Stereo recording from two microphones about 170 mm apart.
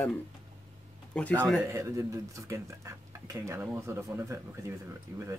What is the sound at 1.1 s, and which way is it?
Speech, 5° left (ahead or behind).